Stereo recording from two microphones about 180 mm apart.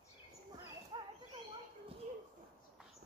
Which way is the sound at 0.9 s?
25° right (ahead or behind).